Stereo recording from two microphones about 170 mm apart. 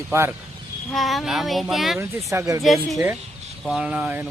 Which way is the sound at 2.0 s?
15° right (ahead or behind).